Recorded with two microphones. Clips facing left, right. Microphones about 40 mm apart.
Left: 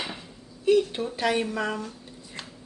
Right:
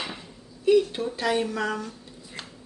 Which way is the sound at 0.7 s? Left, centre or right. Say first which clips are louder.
Right 1 dB; centre.